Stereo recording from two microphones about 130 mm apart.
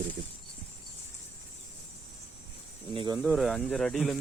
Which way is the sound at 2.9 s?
40° right (ahead or behind).